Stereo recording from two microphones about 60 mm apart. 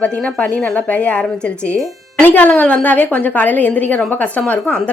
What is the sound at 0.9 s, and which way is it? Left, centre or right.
Speech, left.